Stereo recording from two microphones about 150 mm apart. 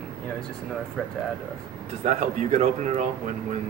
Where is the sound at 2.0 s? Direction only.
55° right (ahead or behind).